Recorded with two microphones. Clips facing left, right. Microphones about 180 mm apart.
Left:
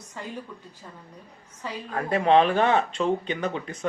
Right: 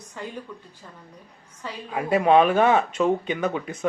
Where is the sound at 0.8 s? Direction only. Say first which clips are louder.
Left 1 dB; 5° left (ahead or behind).